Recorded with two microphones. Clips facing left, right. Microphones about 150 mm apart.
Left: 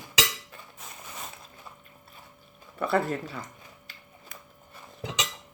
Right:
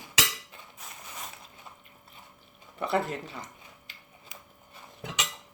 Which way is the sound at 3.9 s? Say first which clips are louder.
Left 2 dB; 20° right (ahead or behind).